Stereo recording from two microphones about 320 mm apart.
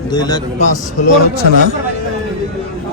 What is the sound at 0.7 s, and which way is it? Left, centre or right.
Speech, left.